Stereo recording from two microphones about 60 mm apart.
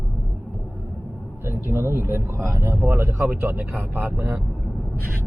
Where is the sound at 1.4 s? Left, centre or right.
Right.